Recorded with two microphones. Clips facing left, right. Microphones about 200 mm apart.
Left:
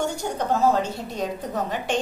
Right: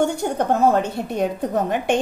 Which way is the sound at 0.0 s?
55° right (ahead or behind).